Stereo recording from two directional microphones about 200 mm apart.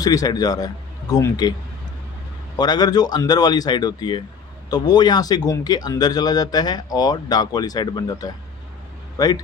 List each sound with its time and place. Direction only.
0.0 s speech: 20° left (ahead or behind)
2.6 s speech: 20° left (ahead or behind)